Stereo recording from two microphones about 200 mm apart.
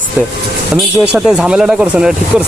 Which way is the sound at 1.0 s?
5° right (ahead or behind).